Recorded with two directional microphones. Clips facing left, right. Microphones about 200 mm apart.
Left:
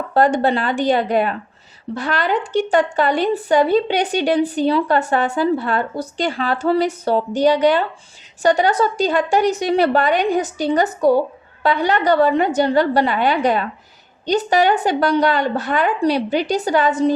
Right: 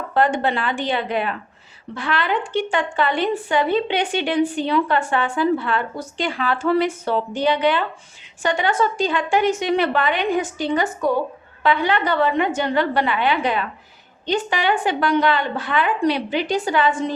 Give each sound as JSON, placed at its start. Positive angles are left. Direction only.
{"t": 0.1, "sound": "a woman's voice", "side_deg": 40}